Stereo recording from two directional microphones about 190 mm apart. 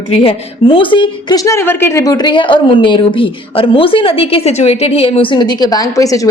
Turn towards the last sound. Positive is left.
turn(degrees=15)  # may be behind; listen again after turning